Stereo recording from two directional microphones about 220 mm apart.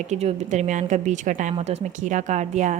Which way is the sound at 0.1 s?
30° right (ahead or behind).